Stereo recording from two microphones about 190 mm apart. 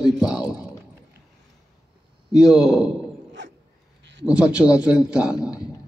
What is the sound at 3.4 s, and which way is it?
Dog, 70° right (ahead or behind).